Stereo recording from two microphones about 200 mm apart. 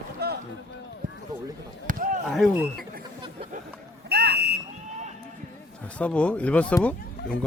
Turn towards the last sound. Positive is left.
turn(degrees=5)  # may be behind; listen again after turning